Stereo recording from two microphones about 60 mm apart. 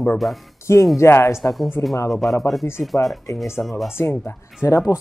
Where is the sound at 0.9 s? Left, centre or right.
Left.